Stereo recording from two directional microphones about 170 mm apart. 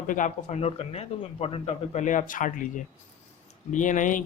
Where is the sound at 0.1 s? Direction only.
45° left (ahead or behind).